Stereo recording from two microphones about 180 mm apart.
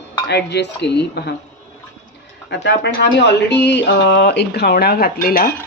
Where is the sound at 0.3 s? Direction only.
70° left (ahead or behind).